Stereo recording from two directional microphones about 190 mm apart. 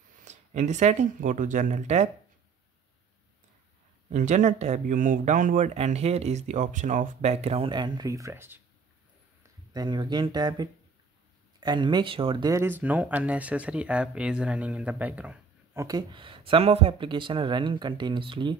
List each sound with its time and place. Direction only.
0.2 s speech: 40° right (ahead or behind)
4.1 s speech: 40° right (ahead or behind); by 8.5 s 15° right (ahead or behind)
9.7 s speech: 20° right (ahead or behind)